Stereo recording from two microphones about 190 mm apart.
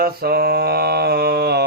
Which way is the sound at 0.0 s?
55° right (ahead or behind).